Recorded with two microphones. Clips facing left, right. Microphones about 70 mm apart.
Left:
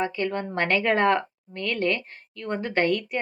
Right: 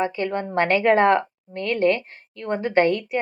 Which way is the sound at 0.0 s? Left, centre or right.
Centre.